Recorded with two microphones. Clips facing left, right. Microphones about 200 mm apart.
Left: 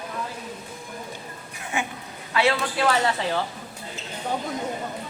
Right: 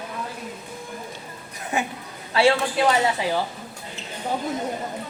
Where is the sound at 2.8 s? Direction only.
15° right (ahead or behind).